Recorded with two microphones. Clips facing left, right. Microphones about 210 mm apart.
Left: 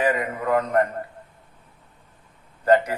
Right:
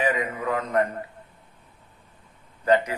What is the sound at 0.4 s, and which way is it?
Speech, 50° left (ahead or behind).